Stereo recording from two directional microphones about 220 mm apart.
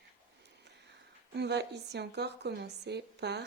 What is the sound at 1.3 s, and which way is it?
Speech, 50° right (ahead or behind).